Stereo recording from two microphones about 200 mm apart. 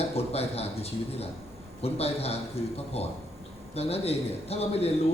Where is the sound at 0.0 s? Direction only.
30° left (ahead or behind).